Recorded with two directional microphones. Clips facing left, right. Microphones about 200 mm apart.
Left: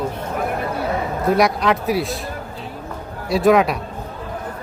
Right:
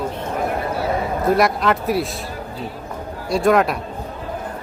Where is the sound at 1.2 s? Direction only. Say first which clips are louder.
Left 1 dB; centre (ahead or behind).